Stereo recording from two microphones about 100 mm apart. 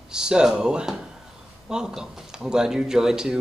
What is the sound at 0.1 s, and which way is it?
Speech, 5° right (ahead or behind).